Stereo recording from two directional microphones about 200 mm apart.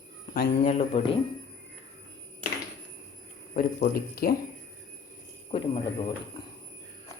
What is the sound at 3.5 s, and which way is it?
Speech, 45° left (ahead or behind).